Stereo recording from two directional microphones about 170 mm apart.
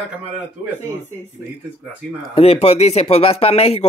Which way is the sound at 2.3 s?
35° left (ahead or behind).